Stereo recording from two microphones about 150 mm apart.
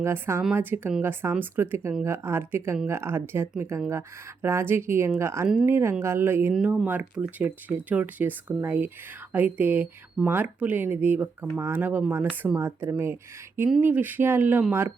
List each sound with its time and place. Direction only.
0.0 s speech: 15° right (ahead or behind)
6.5 s speech: 5° right (ahead or behind)